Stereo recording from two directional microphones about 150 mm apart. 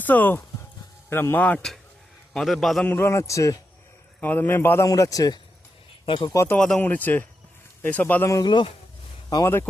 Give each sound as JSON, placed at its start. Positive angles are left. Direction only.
{"t": 0.0, "sound": "a man's voice", "side_deg": 10}
{"t": 2.9, "sound": "a man's voice", "side_deg": 15}
{"t": 6.3, "sound": "a man's voice", "side_deg": 15}
{"t": 8.4, "sound": "speech", "side_deg": 30}
{"t": 9.3, "sound": "a man's voice", "side_deg": 20}